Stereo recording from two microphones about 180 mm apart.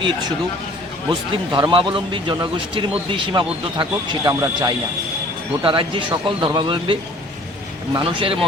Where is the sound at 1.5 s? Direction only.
25° right (ahead or behind).